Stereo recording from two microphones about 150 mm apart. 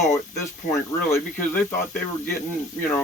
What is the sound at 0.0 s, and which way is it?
Speech, 20° left (ahead or behind).